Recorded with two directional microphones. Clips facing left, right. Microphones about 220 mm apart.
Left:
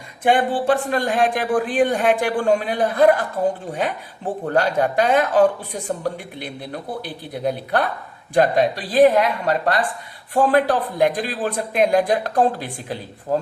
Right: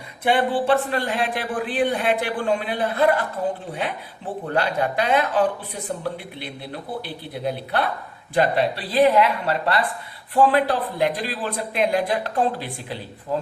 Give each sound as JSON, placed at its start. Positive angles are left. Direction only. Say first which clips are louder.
{"t": 0.3, "sound": "a man's voice", "louder": "left 2 dB", "side_deg": 45}
{"t": 4.5, "sound": "a man's voice", "louder": "left 4 dB", "side_deg": 45}
{"t": 7.0, "sound": "a man's voice", "louder": "left 6 dB", "side_deg": 45}